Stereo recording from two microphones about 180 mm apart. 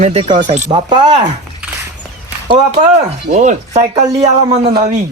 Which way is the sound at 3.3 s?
45° right (ahead or behind).